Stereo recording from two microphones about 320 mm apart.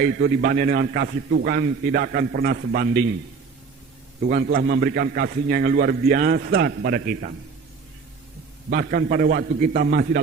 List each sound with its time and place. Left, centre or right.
0.0 s a man's voice: right
4.3 s a man's voice: right
8.7 s a man's voice: right